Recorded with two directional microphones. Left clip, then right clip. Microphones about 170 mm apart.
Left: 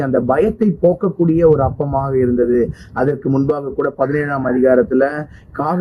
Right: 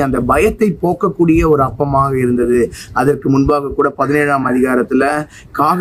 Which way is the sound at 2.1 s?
25° right (ahead or behind).